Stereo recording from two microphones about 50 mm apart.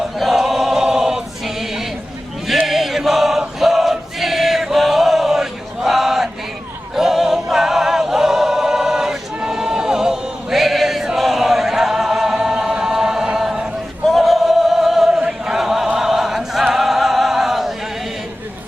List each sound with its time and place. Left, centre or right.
0.2 s choir: centre
2.6 s choir: centre
14.0 s choir: centre
16.7 s music: centre